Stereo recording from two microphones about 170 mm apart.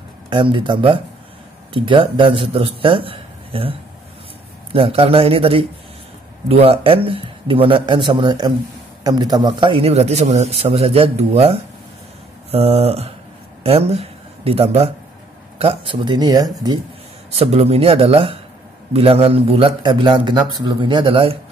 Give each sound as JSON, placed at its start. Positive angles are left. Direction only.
{"t": 0.3, "sound": "a man's voice", "side_deg": -30}
{"t": 4.7, "sound": "a man's voice", "side_deg": -35}
{"t": 17.4, "sound": "a man's voice", "side_deg": -35}